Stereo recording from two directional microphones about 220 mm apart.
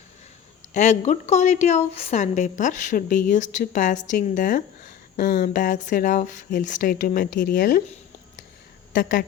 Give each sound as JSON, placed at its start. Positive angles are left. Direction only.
{"t": 0.7, "sound": "speech", "side_deg": 30}
{"t": 8.9, "sound": "speech", "side_deg": 40}